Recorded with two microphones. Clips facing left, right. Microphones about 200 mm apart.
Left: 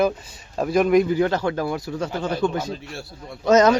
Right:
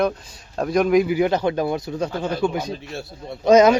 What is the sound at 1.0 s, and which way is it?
Speech, 15° right (ahead or behind).